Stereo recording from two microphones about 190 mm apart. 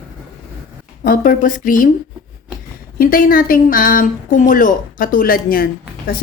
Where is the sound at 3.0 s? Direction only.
50° left (ahead or behind).